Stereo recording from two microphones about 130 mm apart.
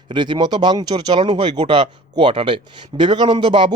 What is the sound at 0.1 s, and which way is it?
Speech, 35° right (ahead or behind).